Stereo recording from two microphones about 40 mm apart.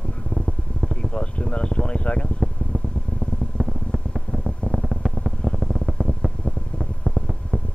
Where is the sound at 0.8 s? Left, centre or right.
Centre.